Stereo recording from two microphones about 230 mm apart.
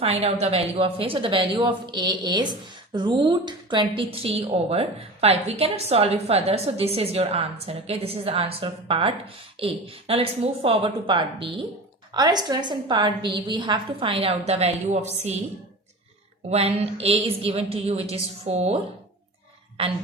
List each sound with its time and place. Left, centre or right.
0.0 s speech: right
16.5 s speech: right